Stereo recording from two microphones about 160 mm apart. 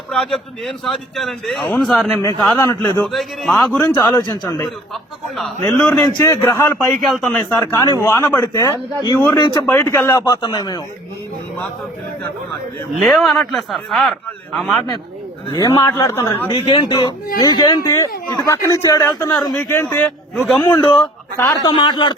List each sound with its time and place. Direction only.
0.1 s speech: 5° left (ahead or behind)
2.6 s a man's voice: 15° left (ahead or behind)
3.1 s speech: centre (ahead or behind)
4.1 s a man's voice: 20° left (ahead or behind)
6.7 s a man's voice: 5° left (ahead or behind); by 10.8 s 25° left (ahead or behind)
13.0 s speech: centre (ahead or behind)
15.5 s speech: 20° left (ahead or behind)
16.6 s a man's voice: 35° left (ahead or behind)